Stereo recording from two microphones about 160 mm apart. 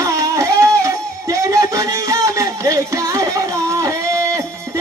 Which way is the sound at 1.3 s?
20° right (ahead or behind).